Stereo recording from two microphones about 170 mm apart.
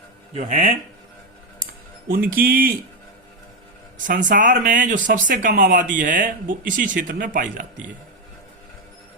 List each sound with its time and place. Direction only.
0.3 s speech: 45° right (ahead or behind)
2.0 s a man's voice: 60° right (ahead or behind)
3.9 s a man's voice: 50° right (ahead or behind)